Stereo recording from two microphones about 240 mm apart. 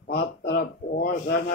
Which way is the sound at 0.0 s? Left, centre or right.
Left.